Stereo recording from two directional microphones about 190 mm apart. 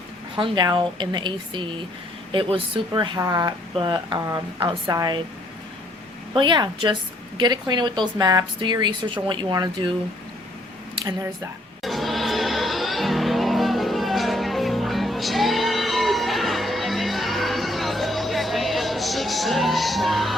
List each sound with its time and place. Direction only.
0.3 s speech: 25° right (ahead or behind)
6.3 s speech: 25° right (ahead or behind)
11.8 s music: centre (ahead or behind)